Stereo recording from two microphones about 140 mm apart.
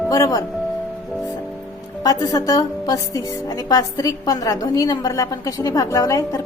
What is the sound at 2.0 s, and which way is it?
A woman's voice, 25° left (ahead or behind).